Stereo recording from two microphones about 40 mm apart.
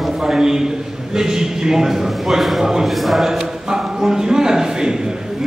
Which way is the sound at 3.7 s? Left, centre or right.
Centre.